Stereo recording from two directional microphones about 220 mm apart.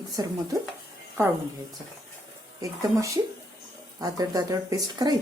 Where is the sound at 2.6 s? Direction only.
15° right (ahead or behind).